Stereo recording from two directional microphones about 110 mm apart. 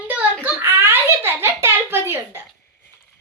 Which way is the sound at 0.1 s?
15° right (ahead or behind).